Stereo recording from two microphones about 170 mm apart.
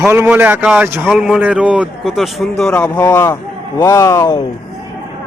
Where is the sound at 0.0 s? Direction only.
15° right (ahead or behind); by 4.4 s 20° left (ahead or behind).